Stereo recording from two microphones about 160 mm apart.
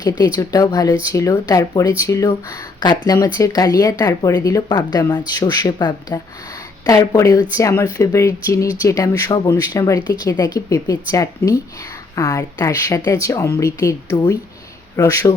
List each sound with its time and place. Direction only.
0.3 s speech: 25° left (ahead or behind)